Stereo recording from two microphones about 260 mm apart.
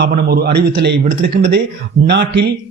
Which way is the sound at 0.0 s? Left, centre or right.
Right.